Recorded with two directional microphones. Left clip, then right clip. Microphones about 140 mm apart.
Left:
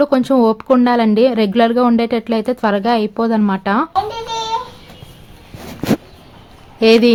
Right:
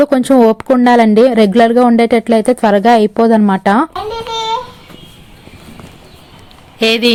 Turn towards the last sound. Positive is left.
turn(degrees=5)  # may be behind; listen again after turning